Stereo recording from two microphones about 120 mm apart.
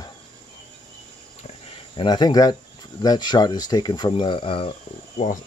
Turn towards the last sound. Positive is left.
turn(degrees=90)